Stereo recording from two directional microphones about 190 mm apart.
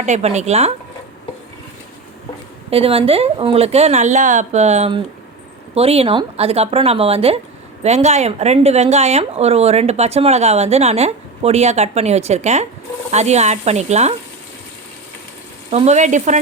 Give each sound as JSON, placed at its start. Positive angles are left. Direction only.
{"t": 0.0, "sound": "speech", "side_deg": -35}
{"t": 2.6, "sound": "speech", "side_deg": -30}
{"t": 15.7, "sound": "speech", "side_deg": -35}